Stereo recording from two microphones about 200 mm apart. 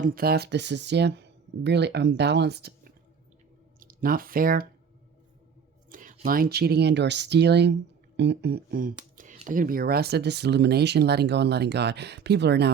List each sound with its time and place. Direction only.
0.0 s speech: 45° right (ahead or behind)
5.9 s speech: 45° right (ahead or behind)